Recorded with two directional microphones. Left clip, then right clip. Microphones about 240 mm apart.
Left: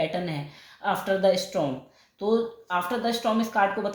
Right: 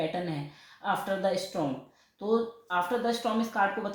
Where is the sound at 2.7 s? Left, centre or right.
Left.